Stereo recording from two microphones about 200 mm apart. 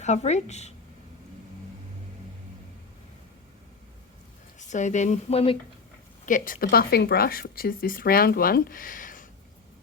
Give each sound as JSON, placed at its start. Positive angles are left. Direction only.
{"t": 0.0, "sound": "speech", "side_deg": 35}
{"t": 4.7, "sound": "speech", "side_deg": 35}
{"t": 6.2, "sound": "speech", "side_deg": 40}